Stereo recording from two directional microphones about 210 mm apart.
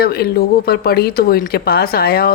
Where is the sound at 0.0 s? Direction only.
45° left (ahead or behind).